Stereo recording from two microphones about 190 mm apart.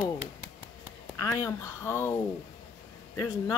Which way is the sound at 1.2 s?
15° left (ahead or behind).